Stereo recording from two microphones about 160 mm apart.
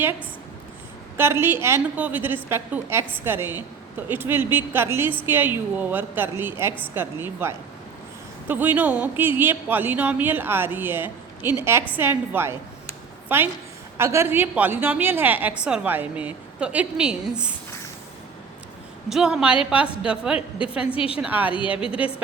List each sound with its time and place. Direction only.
1.1 s a woman's voice: 15° right (ahead or behind)
19.0 s a woman's voice: 5° right (ahead or behind)
20.9 s a woman's voice: 35° left (ahead or behind)
21.2 s a woman's voice: 10° right (ahead or behind)